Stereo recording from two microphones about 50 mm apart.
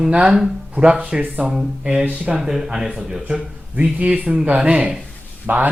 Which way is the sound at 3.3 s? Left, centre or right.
Right.